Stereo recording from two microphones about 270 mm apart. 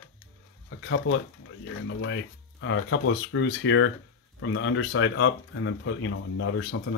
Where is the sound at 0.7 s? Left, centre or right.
Left.